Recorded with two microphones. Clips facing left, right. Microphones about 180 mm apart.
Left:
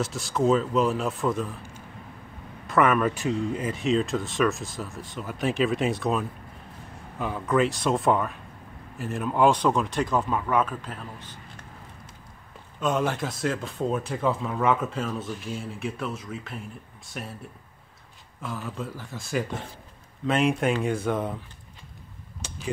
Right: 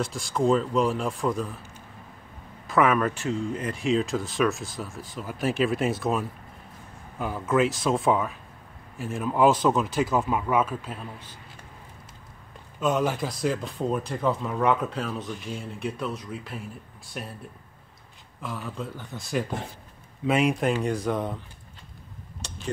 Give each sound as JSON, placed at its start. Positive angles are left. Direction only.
{"t": 0.0, "sound": "speech", "side_deg": 0}
{"t": 2.6, "sound": "speech", "side_deg": 0}
{"t": 3.2, "sound": "speech", "side_deg": 10}
{"t": 12.8, "sound": "speech", "side_deg": 0}
{"t": 18.4, "sound": "speech", "side_deg": 0}